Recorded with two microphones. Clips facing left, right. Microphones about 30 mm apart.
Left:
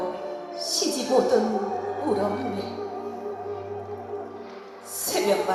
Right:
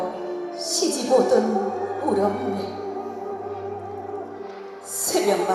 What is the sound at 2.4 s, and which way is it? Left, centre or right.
Music, right.